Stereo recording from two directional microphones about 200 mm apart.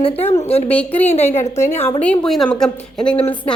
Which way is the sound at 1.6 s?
10° left (ahead or behind).